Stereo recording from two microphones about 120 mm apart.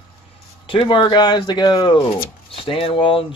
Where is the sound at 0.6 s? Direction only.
45° left (ahead or behind).